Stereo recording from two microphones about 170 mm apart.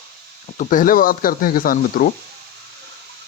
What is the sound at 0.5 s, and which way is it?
Speech, 50° left (ahead or behind).